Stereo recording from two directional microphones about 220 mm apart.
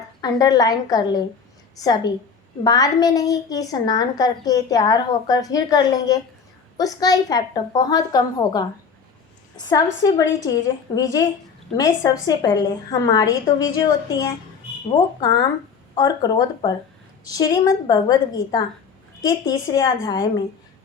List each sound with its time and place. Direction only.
0.2 s a woman's voice: 15° left (ahead or behind)